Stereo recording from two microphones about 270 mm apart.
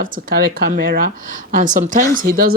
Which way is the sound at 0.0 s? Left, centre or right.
Right.